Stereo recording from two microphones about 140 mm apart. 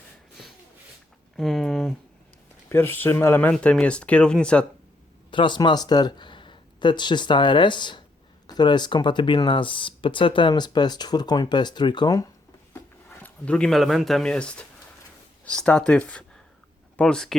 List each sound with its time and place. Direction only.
1.4 s speech: centre (ahead or behind)
2.6 s speech: 15° left (ahead or behind)
5.3 s speech: 35° left (ahead or behind)
13.2 s speech: 10° left (ahead or behind)